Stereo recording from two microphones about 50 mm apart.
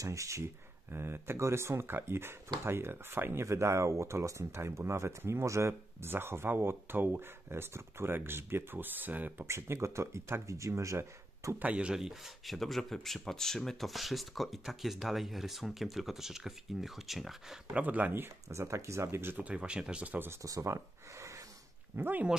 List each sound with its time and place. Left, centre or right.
0.0 s speech: right
0.9 s speech: right
3.4 s speech: right
6.1 s speech: right
9.5 s speech: right
10.4 s speech: right
11.6 s speech: right
11.9 s speech: centre
12.4 s speech: centre
17.8 s speech: right
18.5 s speech: right
19.3 s speech: right
20.6 s a sound: right
21.9 s speech: right